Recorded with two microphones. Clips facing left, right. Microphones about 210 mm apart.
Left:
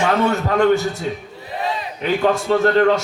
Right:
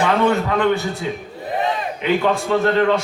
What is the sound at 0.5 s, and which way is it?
Speech, 45° left (ahead or behind).